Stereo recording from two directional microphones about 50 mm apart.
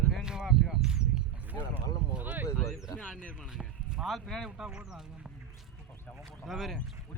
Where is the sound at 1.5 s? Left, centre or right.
Right.